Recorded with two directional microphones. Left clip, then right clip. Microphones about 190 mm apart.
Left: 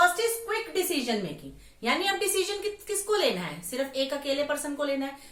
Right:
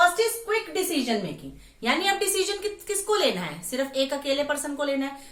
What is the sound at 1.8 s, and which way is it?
A woman's voice, 25° right (ahead or behind).